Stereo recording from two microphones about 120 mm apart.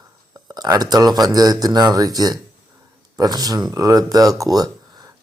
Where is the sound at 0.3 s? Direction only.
35° right (ahead or behind).